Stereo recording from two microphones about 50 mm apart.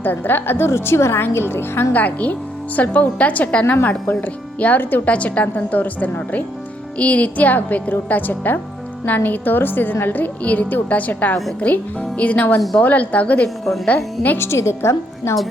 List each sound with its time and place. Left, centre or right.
0.0 s a woman's voice: left
1.9 s a woman's voice: left
5.0 s a woman's voice: left
14.3 s a woman's voice: left